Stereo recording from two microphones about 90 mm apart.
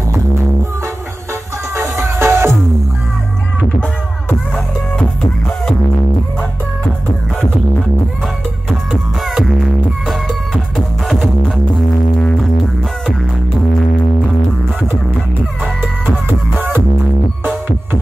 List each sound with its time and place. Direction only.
1.8 s music: 25° right (ahead or behind)
4.9 s music: 10° left (ahead or behind)
9.2 s music: centre (ahead or behind)
16.3 s music: 25° right (ahead or behind)